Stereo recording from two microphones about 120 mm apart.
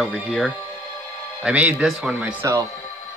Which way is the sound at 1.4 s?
10° right (ahead or behind).